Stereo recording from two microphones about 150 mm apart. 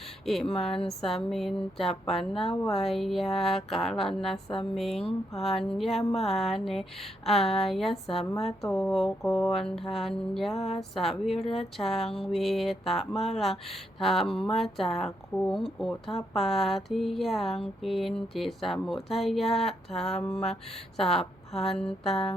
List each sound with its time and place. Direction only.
0.3 s speech: 5° left (ahead or behind)